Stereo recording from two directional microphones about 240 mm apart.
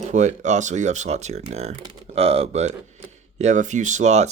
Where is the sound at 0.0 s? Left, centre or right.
Right.